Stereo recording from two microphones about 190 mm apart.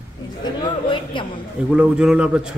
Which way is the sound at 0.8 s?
25° left (ahead or behind).